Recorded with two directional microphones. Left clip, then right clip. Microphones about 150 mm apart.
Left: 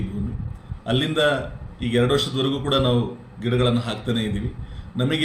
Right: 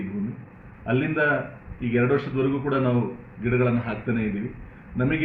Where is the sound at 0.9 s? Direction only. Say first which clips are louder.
Left 2 dB; 25° left (ahead or behind).